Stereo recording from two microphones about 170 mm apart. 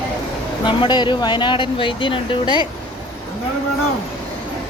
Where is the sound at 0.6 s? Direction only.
25° left (ahead or behind).